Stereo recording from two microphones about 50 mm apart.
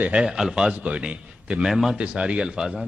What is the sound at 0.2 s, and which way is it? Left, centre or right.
Speech, centre.